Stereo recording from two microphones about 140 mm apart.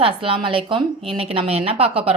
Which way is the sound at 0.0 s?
40° right (ahead or behind).